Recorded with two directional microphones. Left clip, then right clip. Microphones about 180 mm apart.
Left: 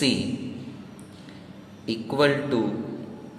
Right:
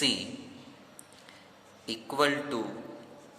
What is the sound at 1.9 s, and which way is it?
Speech, 35° right (ahead or behind).